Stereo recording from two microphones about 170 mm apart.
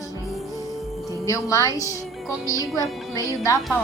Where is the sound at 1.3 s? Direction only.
20° left (ahead or behind).